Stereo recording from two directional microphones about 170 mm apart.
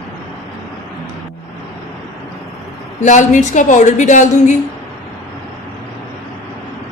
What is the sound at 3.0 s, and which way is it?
A woman's voice, 45° left (ahead or behind).